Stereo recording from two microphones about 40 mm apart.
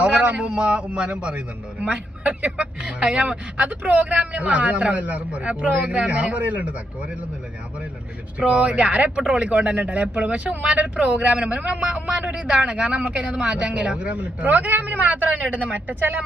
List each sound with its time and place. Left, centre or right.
0.0 s a man's voice: right
2.8 s a man's voice: right
8.4 s speech: right
12.3 s a man's voice: right
14.1 s a man's voice: right